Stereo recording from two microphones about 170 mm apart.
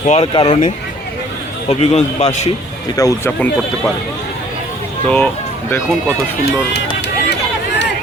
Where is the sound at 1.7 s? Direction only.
35° left (ahead or behind).